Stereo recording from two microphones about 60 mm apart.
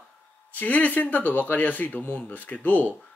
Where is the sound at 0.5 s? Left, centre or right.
Left.